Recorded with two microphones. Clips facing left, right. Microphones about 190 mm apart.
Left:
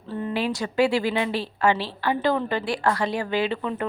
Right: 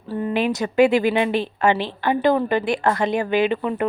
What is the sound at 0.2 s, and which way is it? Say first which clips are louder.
A woman's voice: right 5 dB; 20° right (ahead or behind).